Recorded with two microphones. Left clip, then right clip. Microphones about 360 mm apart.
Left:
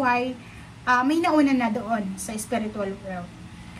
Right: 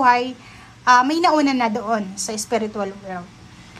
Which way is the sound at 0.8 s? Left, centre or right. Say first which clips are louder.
Right 7 dB; centre.